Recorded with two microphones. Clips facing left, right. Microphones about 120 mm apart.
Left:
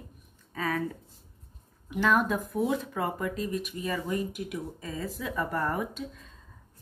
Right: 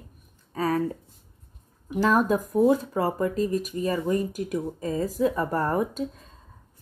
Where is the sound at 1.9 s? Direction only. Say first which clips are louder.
Right 4 dB; 35° right (ahead or behind).